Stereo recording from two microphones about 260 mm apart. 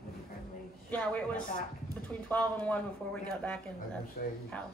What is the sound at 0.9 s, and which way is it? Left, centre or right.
A woman's voice, centre.